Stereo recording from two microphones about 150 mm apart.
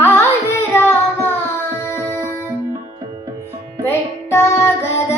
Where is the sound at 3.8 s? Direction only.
15° left (ahead or behind).